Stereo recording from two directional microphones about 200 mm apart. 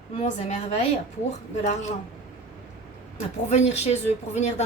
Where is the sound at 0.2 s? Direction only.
35° left (ahead or behind).